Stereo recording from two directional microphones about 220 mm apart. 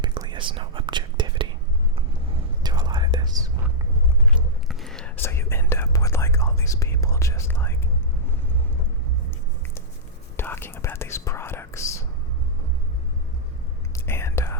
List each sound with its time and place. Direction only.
0.0 s whispering: 20° right (ahead or behind)
2.6 s whispering: 20° right (ahead or behind)
4.3 s whispering: centre (ahead or behind)
10.3 s whispering: 10° left (ahead or behind)
13.9 s whispering: 10° left (ahead or behind)